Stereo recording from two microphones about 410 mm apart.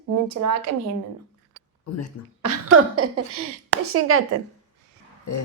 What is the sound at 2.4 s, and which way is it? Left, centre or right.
Speech, right.